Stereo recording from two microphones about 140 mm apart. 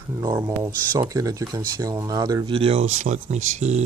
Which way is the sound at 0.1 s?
20° right (ahead or behind).